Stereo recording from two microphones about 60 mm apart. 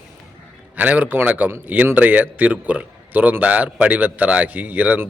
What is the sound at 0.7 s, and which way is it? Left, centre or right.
A man's voice, right.